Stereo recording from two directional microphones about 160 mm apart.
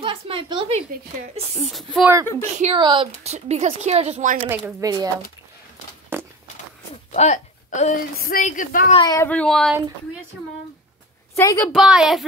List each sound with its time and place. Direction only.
0.0 s a woman's voice: 30° right (ahead or behind)
0.9 s a woman's voice: 65° right (ahead or behind)
1.7 s a woman's voice: centre (ahead or behind)
2.3 s speech: 35° right (ahead or behind)
3.3 s speech: 45° right (ahead or behind)
4.5 s speech: 10° right (ahead or behind)
4.8 s speech: 25° right (ahead or behind)
6.1 s a sound: 15° right (ahead or behind)
7.2 s a woman's voice: 45° left (ahead or behind)
8.9 s speech: 25° left (ahead or behind)
9.2 s a woman's voice: 5° left (ahead or behind)
11.3 s speech: 20° left (ahead or behind)
11.6 s a woman's voice: 5° right (ahead or behind)